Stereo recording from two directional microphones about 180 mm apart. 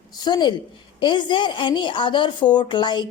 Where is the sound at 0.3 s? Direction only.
25° left (ahead or behind).